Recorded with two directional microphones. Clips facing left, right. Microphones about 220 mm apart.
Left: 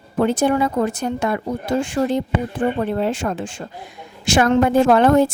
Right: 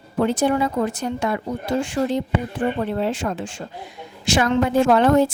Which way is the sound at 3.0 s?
50° left (ahead or behind).